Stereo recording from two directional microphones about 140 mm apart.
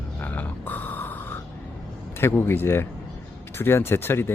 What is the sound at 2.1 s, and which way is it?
Speech, 15° left (ahead or behind).